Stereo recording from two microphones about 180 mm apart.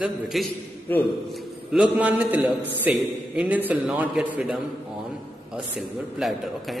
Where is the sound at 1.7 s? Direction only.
5° right (ahead or behind).